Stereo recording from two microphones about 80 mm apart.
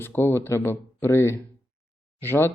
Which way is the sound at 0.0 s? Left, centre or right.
Left.